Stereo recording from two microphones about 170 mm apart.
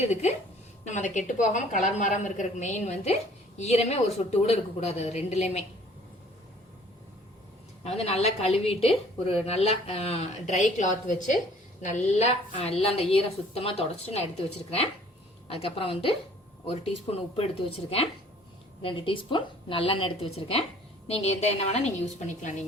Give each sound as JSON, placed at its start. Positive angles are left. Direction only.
{"t": 0.1, "sound": "a woman's voice", "side_deg": 40}
{"t": 7.9, "sound": "a woman's voice", "side_deg": 40}
{"t": 15.4, "sound": "a woman's voice", "side_deg": 35}